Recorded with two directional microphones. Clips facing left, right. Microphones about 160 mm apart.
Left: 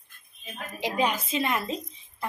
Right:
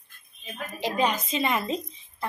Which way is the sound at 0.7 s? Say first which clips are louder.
Right 1 dB; 10° left (ahead or behind).